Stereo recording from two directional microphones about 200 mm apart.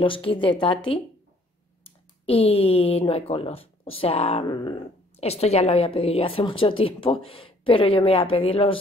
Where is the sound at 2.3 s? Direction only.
30° left (ahead or behind).